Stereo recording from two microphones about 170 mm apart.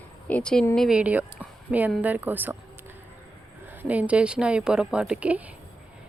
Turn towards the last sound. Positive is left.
turn(degrees=-5)  # may be behind; listen again after turning